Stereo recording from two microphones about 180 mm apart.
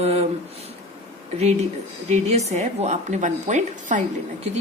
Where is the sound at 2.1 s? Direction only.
40° right (ahead or behind).